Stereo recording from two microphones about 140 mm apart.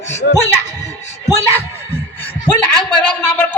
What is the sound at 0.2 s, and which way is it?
Speech, 90° left.